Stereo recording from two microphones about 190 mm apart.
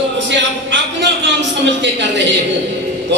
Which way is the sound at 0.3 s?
70° right (ahead or behind).